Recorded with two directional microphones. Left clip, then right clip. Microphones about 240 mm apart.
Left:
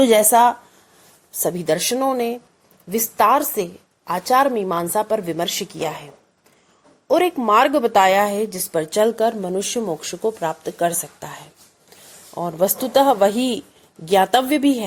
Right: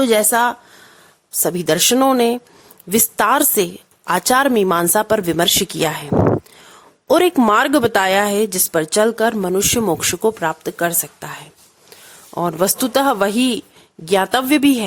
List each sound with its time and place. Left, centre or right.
0.0 s a woman's voice: centre; by 6.1 s right
7.1 s speech: right